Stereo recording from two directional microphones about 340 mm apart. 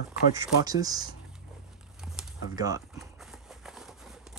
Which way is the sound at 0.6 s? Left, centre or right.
Centre.